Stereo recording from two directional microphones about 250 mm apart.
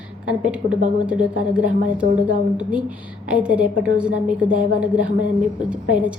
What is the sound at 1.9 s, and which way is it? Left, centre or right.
A woman's voice, centre.